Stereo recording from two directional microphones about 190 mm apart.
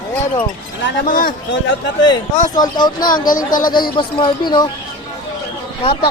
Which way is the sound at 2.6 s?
20° left (ahead or behind).